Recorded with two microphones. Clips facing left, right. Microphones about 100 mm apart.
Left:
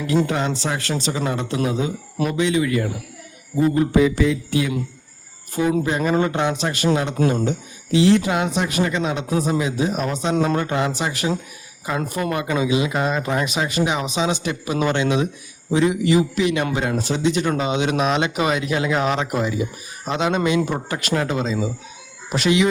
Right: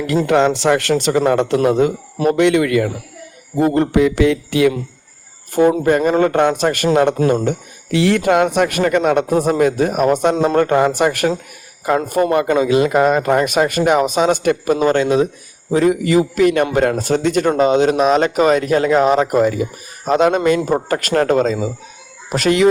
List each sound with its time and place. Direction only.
0.3 s a man's voice: 70° right (ahead or behind)
5.6 s speech: 45° right (ahead or behind)
10.3 s a man's voice: 30° right (ahead or behind)
10.6 s speech: 50° right (ahead or behind)
11.9 s speech: 45° right (ahead or behind)
14.8 s a man's voice: 35° right (ahead or behind)